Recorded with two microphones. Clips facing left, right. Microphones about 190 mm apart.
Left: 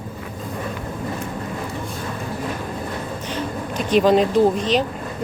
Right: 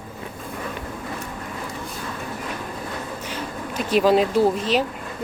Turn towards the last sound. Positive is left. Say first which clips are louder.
# left 2 dB
turn(degrees=-5)  # may be behind; listen again after turning